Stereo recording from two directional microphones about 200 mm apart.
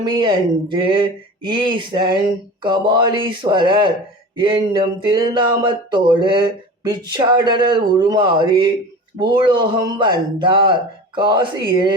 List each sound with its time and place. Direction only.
0.0 s speech: 25° right (ahead or behind)